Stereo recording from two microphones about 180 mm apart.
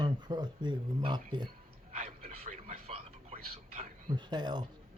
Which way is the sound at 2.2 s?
50° right (ahead or behind).